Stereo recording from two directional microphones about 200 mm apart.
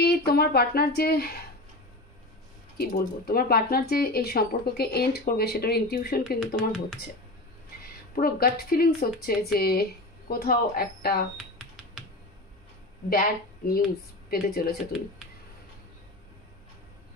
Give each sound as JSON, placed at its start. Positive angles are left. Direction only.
{"t": 0.0, "sound": "speech", "side_deg": 55}
{"t": 2.8, "sound": "speech", "side_deg": 50}
{"t": 6.5, "sound": "speech", "side_deg": 0}
{"t": 8.2, "sound": "speech", "side_deg": 50}
{"t": 11.3, "sound": "computer keyboard", "side_deg": 0}
{"t": 13.1, "sound": "speech", "side_deg": 50}